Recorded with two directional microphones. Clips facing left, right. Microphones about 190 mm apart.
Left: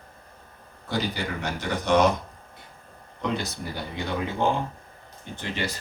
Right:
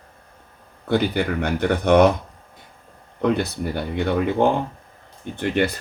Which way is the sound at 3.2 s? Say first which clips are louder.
Right 8 dB; 55° right (ahead or behind).